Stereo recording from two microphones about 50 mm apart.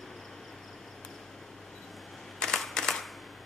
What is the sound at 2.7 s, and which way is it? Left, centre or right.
Camera, centre.